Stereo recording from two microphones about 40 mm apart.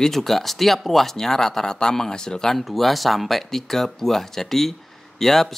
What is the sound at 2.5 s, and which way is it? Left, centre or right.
Speech, centre.